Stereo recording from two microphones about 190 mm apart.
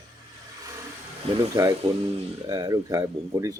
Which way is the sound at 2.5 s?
20° right (ahead or behind).